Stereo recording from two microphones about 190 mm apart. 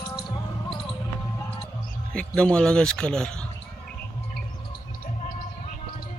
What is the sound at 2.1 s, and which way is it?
Speech, 5° left (ahead or behind).